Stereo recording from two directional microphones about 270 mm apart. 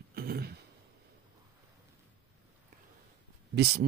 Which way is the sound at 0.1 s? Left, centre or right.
Right.